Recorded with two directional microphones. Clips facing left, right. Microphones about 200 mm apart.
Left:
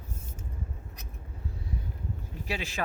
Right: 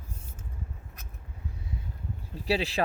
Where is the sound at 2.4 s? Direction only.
35° right (ahead or behind).